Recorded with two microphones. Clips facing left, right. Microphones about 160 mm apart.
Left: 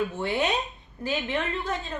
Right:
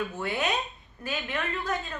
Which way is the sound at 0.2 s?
25° left (ahead or behind).